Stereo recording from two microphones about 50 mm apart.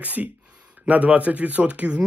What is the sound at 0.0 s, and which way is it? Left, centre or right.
Speech, right.